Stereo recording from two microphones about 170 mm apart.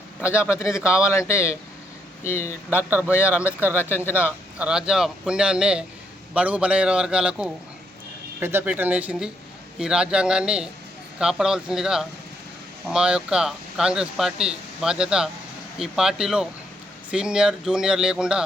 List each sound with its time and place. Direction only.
0.3 s speech: 15° left (ahead or behind)
3.2 s a man's voice: 10° right (ahead or behind)
3.8 s speech: 15° left (ahead or behind)
4.3 s a man's voice: 10° right (ahead or behind)